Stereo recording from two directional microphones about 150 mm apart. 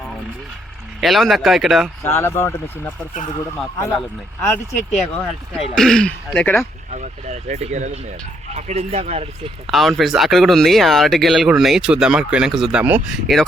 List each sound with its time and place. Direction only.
1.0 s speech: centre (ahead or behind)
2.0 s speech: 15° left (ahead or behind)
4.4 s speech: 15° left (ahead or behind)
4.9 s speech: centre (ahead or behind)
6.9 s speech: 50° right (ahead or behind)
9.6 s speech: centre (ahead or behind)
13.1 s speech: centre (ahead or behind)